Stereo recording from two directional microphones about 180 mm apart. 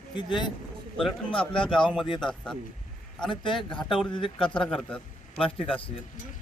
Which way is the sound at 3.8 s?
Centre (ahead or behind).